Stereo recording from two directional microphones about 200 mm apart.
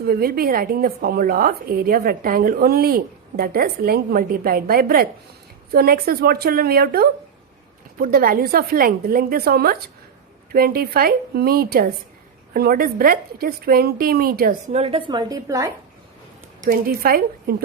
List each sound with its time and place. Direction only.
0.1 s a woman's voice: 50° right (ahead or behind)
14.7 s a woman's voice: 30° right (ahead or behind)
16.6 s a woman's voice: 50° right (ahead or behind)